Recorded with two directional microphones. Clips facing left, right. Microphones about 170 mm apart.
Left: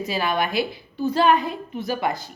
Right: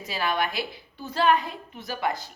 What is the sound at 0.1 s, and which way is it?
A woman's voice, 15° left (ahead or behind).